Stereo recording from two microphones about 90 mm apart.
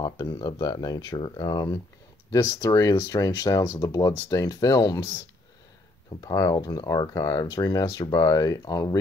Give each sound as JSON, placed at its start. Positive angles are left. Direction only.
{"t": 0.0, "sound": "speech", "side_deg": 50}
{"t": 6.2, "sound": "speech", "side_deg": 40}